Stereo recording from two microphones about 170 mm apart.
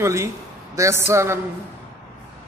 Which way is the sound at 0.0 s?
15° right (ahead or behind).